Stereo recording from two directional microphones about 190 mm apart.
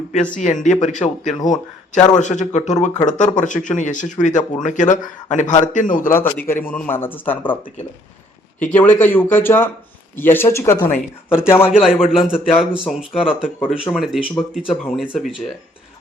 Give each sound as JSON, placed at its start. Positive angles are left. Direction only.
{"t": 0.1, "sound": "a man's voice", "side_deg": 40}
{"t": 6.5, "sound": "speech", "side_deg": 10}
{"t": 11.7, "sound": "a man's voice", "side_deg": -5}